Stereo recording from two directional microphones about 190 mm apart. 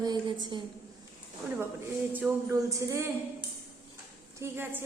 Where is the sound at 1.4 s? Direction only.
10° right (ahead or behind).